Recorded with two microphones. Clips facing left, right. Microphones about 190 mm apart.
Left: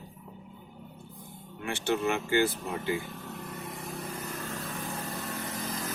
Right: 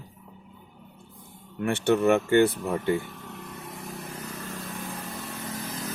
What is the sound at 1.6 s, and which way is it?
Speech, 60° right (ahead or behind).